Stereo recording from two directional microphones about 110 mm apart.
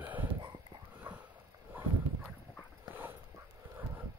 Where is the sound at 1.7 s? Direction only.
15° right (ahead or behind).